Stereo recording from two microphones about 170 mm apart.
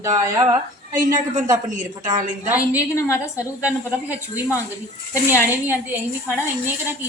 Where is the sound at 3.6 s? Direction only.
10° right (ahead or behind).